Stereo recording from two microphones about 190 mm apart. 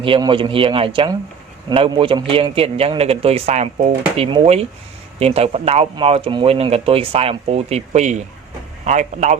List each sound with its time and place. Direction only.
0.0 s a man's voice: 25° right (ahead or behind)